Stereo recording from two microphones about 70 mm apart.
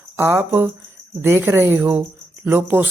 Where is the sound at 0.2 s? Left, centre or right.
Right.